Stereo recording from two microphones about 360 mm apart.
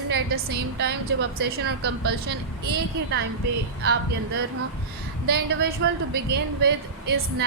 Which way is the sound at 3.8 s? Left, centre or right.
Right.